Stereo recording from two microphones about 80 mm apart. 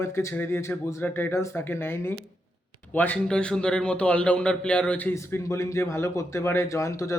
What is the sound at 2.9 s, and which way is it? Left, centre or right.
A man's voice, left.